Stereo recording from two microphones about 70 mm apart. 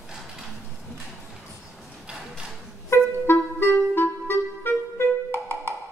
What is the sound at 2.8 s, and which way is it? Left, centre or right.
Music, left.